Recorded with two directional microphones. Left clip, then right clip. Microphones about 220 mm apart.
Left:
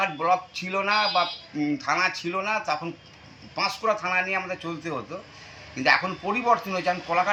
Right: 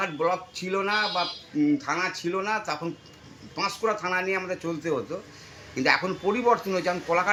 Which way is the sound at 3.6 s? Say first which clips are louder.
Left 1 dB; centre (ahead or behind).